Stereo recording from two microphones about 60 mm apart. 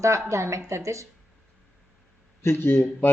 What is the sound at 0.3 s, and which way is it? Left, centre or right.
Speech, right.